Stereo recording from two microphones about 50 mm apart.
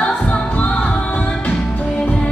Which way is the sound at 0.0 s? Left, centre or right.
Left.